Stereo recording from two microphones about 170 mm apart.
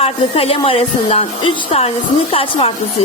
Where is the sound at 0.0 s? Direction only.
35° left (ahead or behind).